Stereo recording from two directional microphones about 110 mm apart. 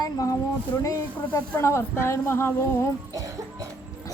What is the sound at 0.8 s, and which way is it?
Speech, 25° left (ahead or behind).